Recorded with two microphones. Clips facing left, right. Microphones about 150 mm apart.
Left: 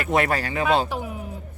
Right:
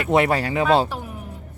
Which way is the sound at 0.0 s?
25° right (ahead or behind).